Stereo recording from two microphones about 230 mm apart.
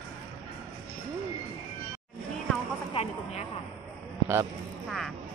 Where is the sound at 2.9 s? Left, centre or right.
Left.